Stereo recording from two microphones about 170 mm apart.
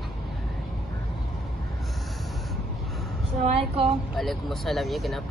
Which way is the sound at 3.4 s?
35° right (ahead or behind).